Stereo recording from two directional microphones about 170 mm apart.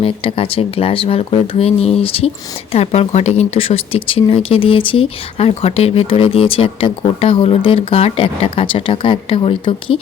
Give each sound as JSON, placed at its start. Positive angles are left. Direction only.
{"t": 0.0, "sound": "speech", "side_deg": 35}